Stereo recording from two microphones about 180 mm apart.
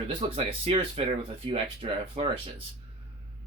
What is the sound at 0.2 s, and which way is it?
Speech, 30° right (ahead or behind).